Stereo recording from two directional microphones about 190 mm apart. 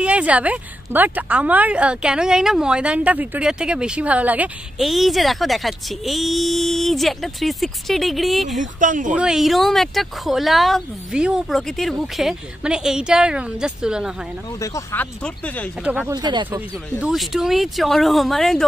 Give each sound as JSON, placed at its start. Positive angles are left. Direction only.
{"t": 0.0, "sound": "a woman's voice", "side_deg": -5}
{"t": 8.7, "sound": "speech", "side_deg": -45}
{"t": 9.1, "sound": "a woman's voice", "side_deg": -5}
{"t": 14.6, "sound": "speech", "side_deg": 15}
{"t": 15.8, "sound": "speech", "side_deg": -5}
{"t": 16.1, "sound": "speech", "side_deg": -20}
{"t": 17.0, "sound": "a woman's voice", "side_deg": 0}